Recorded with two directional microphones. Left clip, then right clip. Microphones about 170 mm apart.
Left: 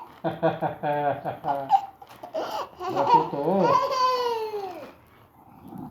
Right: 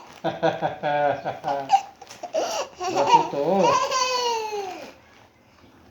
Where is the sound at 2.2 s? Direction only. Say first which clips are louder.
Right 5 dB; 35° right (ahead or behind).